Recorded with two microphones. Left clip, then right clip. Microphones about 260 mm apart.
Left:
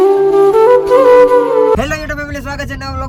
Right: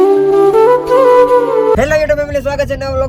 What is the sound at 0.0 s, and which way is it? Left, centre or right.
Music, centre.